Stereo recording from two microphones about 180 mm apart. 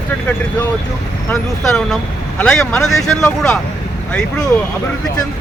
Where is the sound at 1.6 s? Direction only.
Centre (ahead or behind).